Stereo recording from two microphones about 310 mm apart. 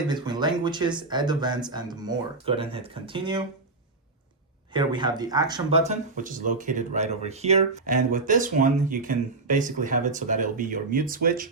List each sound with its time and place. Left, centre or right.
0.1 s speech: centre
4.7 s speech: centre